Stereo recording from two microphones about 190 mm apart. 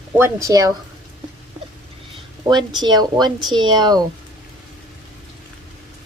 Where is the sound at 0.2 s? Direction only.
15° right (ahead or behind).